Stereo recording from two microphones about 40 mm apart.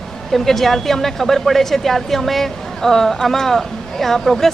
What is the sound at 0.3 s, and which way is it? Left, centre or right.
Speech, centre.